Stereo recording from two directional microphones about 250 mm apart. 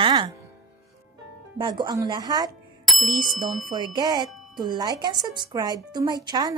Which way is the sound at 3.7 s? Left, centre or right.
Centre.